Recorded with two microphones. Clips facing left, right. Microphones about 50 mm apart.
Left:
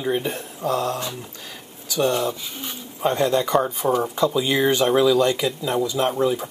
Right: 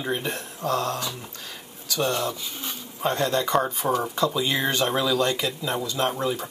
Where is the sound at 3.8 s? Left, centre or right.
Centre.